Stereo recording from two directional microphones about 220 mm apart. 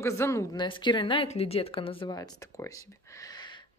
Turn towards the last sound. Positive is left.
turn(degrees=15)  # may be behind; listen again after turning